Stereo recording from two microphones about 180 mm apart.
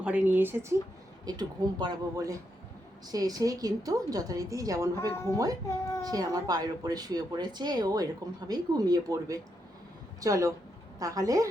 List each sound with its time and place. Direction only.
0.0 s speech: 5° right (ahead or behind)
1.2 s speech: 20° right (ahead or behind)
4.9 s speech: 15° left (ahead or behind)
6.0 s speech: 20° right (ahead or behind)